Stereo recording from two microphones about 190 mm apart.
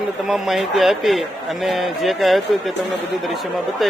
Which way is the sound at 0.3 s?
Centre (ahead or behind).